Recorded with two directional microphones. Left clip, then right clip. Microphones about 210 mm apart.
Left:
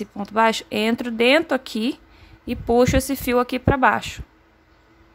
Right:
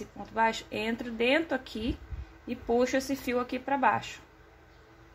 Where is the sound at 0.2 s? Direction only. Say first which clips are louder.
Left 9 dB; 45° left (ahead or behind).